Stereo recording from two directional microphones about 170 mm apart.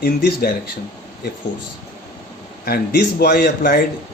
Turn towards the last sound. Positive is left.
turn(degrees=60)  # may be behind; listen again after turning